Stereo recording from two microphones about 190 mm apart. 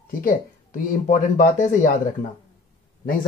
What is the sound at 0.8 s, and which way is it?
Speech, 45° left (ahead or behind).